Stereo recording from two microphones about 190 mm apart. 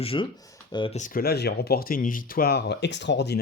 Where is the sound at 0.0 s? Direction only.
30° left (ahead or behind).